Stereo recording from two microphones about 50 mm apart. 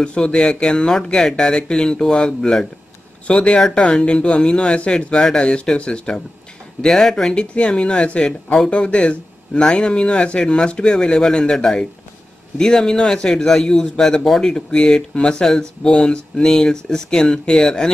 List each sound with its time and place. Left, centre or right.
0.0 s a man's voice: centre
7.5 s a man's voice: left